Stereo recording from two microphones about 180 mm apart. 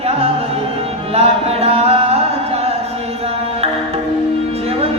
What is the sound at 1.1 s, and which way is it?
Music, 35° right (ahead or behind).